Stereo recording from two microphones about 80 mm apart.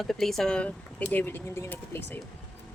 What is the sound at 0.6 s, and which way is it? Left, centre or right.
Speech, centre.